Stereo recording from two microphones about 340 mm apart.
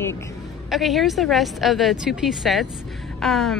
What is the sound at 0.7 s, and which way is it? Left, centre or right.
A woman's voice, centre.